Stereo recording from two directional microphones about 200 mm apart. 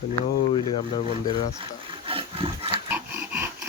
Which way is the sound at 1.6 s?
25° right (ahead or behind).